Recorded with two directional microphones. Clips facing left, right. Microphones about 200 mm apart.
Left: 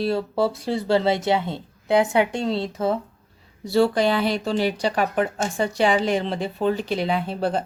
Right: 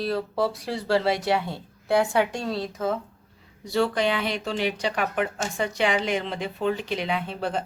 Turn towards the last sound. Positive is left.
turn(degrees=35)  # may be behind; listen again after turning